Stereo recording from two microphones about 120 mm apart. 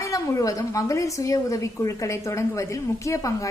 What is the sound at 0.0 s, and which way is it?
A woman's voice, 25° left (ahead or behind).